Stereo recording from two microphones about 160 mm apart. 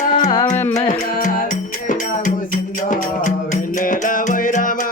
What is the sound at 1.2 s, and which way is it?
Music, 55° left (ahead or behind).